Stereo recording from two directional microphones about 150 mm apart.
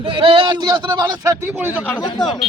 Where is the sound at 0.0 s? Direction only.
35° right (ahead or behind).